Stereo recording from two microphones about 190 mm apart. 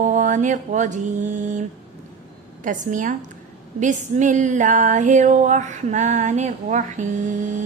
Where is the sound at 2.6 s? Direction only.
45° right (ahead or behind).